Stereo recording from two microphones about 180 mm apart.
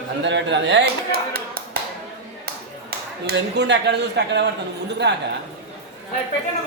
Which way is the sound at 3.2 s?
70° right (ahead or behind).